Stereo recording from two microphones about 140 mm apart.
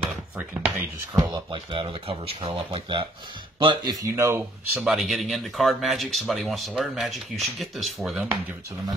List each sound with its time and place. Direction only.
0.4 s speech: 15° right (ahead or behind)
1.1 s speech: 30° right (ahead or behind)
3.5 s speech: 30° right (ahead or behind); by 8.4 s 5° right (ahead or behind)